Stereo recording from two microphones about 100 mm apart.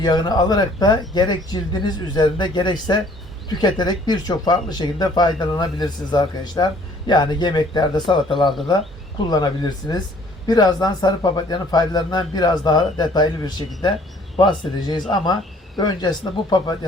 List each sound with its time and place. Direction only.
0.0 s speech: 45° left (ahead or behind)